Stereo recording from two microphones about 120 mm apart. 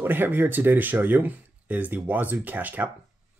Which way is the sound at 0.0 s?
15° right (ahead or behind).